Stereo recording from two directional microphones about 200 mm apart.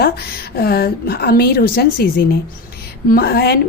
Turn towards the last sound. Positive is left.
turn(degrees=50)  # may be behind; listen again after turning